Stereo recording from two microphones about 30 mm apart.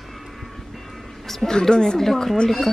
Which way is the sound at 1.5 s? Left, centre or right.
Left.